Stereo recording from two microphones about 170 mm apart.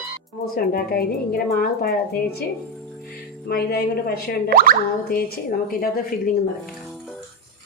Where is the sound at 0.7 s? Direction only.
60° left (ahead or behind).